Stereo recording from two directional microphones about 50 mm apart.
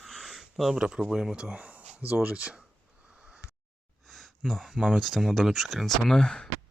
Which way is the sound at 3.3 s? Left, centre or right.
Right.